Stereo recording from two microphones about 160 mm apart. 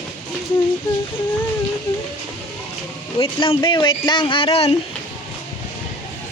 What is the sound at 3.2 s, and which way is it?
Speech, 35° left (ahead or behind).